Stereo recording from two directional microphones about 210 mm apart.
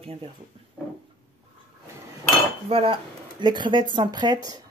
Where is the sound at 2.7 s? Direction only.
25° right (ahead or behind).